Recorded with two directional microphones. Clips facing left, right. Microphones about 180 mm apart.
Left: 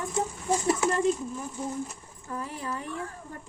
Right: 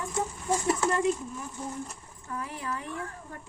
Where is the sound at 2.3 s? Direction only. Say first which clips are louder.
Left 1 dB; 30° left (ahead or behind).